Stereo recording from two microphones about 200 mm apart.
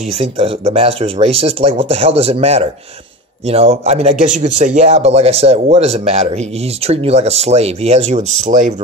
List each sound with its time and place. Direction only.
0.1 s speech: 30° right (ahead or behind)